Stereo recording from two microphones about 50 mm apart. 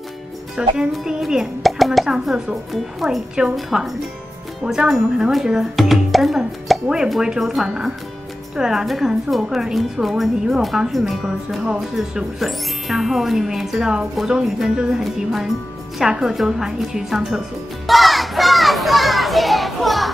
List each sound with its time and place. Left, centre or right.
0.6 s speech: centre
1.6 s a sound: centre
2.0 s speech: centre
5.8 s music: centre
7.1 s speech: centre
12.1 s speech: centre
12.4 s speech: centre
17.8 s children playing: centre